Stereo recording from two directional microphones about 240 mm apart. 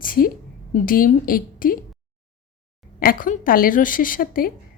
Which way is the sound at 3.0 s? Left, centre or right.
Left.